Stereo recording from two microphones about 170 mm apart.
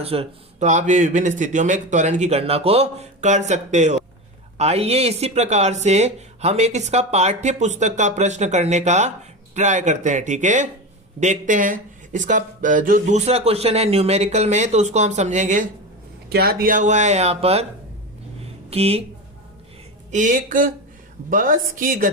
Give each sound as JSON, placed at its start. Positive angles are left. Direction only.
{"t": 0.0, "sound": "speech", "side_deg": -35}
{"t": 16.3, "sound": "speech", "side_deg": -65}
{"t": 18.7, "sound": "speech", "side_deg": -35}
{"t": 20.1, "sound": "speech", "side_deg": -45}